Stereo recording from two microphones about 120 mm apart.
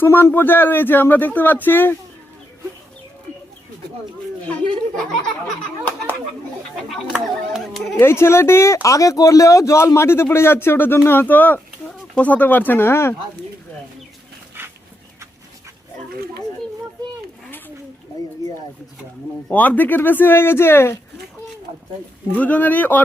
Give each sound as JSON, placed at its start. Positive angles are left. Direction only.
{"t": 0.0, "sound": "speech", "side_deg": 20}
{"t": 6.8, "sound": "speech", "side_deg": 0}
{"t": 7.9, "sound": "speech", "side_deg": 20}
{"t": 19.5, "sound": "speech", "side_deg": 15}
{"t": 22.3, "sound": "speech", "side_deg": 15}